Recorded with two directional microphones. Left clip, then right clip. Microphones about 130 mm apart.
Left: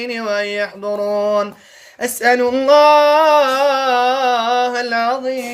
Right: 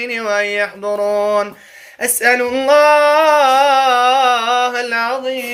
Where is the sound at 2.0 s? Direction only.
35° left (ahead or behind).